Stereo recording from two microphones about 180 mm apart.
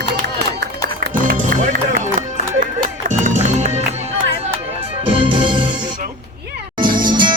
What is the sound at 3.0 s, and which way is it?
Music, 45° right (ahead or behind).